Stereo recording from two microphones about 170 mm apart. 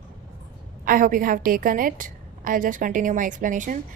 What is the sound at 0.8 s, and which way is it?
A woman's voice, 55° right (ahead or behind).